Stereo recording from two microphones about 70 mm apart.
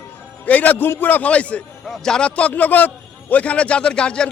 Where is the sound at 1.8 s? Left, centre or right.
Centre.